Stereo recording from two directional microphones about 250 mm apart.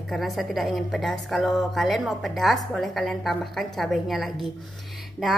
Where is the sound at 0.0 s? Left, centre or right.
Centre.